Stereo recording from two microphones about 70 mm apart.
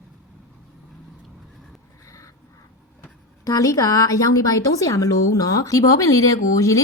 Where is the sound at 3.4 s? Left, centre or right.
Left.